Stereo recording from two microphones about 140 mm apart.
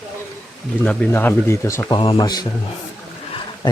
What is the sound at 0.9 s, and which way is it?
Speech, 15° left (ahead or behind).